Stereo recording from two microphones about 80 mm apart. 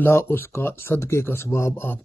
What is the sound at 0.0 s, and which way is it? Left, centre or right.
Speech, left.